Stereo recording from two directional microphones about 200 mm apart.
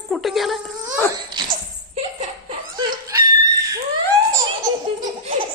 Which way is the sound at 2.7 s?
20° right (ahead or behind).